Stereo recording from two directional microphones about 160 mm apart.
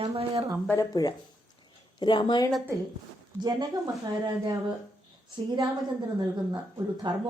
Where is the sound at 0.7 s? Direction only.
20° left (ahead or behind).